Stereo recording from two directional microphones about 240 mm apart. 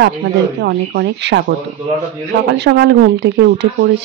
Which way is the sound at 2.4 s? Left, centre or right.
Right.